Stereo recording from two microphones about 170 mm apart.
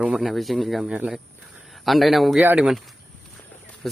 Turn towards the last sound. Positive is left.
turn(degrees=0)  # may be behind; listen again after turning